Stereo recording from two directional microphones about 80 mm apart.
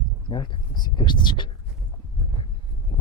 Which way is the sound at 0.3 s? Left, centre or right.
Left.